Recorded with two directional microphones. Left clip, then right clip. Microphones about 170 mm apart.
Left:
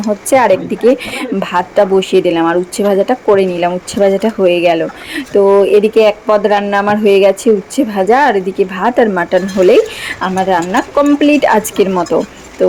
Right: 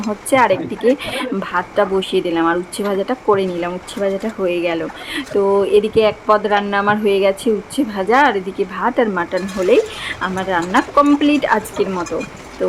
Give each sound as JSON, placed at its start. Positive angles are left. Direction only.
{"t": 0.3, "sound": "a woman's voice", "side_deg": 20}